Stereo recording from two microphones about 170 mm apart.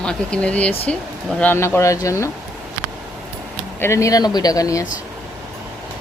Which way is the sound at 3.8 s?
15° left (ahead or behind).